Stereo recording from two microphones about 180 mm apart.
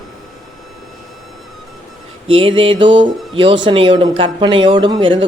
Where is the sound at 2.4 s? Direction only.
30° right (ahead or behind).